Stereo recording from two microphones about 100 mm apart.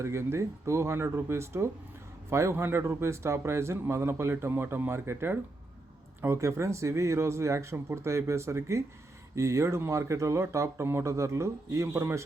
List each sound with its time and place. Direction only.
0.0 s a man's voice: 25° right (ahead or behind)